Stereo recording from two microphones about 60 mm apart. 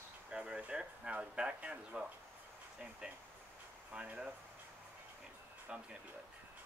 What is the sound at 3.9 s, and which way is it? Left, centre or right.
Speech, centre.